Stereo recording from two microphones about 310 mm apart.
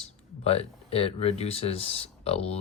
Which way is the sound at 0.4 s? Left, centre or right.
Centre.